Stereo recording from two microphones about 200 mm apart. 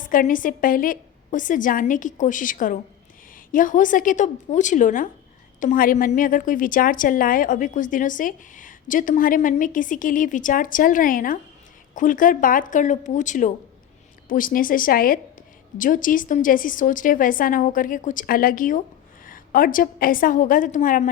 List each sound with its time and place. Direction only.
0.0 s a woman's voice: 45° left (ahead or behind)